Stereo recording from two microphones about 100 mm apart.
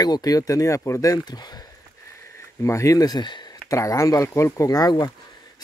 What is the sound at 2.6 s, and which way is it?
Speech, 30° left (ahead or behind).